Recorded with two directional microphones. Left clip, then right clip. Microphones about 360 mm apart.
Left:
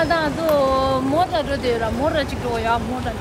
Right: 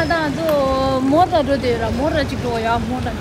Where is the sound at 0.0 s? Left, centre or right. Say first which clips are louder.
Right 1 dB; centre.